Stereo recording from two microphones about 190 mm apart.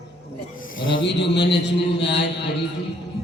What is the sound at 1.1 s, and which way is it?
A man's voice, 65° left (ahead or behind).